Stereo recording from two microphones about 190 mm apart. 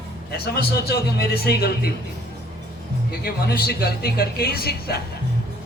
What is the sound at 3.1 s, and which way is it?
A man's voice, 55° left (ahead or behind).